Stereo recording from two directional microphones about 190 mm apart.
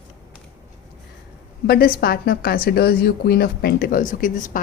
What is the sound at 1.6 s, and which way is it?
A woman's voice, 55° left (ahead or behind).